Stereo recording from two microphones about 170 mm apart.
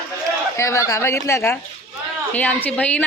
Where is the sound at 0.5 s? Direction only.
15° left (ahead or behind).